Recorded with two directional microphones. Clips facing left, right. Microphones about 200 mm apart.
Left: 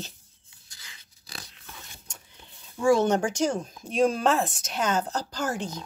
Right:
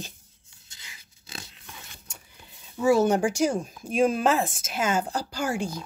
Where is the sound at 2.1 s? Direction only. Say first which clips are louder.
Right 1 dB; 5° right (ahead or behind).